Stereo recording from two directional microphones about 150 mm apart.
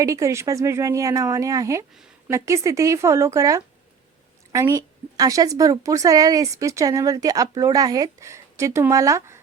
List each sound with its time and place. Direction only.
0.0 s a woman's voice: 20° right (ahead or behind)